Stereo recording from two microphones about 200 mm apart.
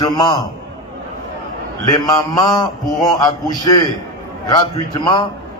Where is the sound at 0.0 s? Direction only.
20° left (ahead or behind).